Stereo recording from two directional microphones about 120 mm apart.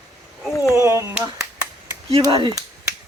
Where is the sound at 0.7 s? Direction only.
25° right (ahead or behind).